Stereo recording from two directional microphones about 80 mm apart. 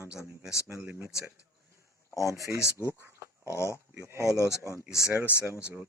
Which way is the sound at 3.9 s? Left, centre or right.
Right.